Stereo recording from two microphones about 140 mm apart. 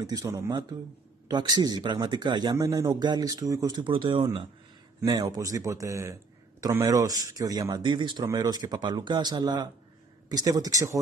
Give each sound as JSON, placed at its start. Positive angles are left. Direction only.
{"t": 0.0, "sound": "speech", "side_deg": -25}